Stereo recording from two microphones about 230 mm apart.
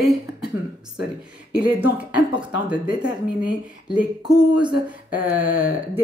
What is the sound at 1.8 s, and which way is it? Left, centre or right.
A woman's voice, centre.